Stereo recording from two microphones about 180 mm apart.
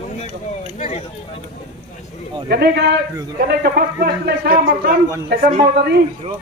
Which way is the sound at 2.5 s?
60° right (ahead or behind).